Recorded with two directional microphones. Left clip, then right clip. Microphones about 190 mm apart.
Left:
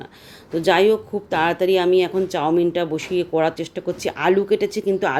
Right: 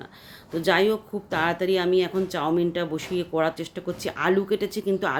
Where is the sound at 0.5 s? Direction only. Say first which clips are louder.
Left 5 dB; 5° left (ahead or behind).